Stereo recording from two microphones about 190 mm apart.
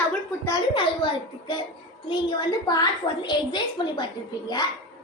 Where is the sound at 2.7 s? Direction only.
20° left (ahead or behind).